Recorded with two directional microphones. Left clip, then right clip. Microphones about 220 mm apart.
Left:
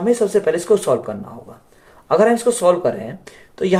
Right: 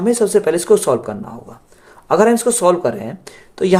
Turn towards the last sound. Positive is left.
turn(degrees=-50)  # may be behind; listen again after turning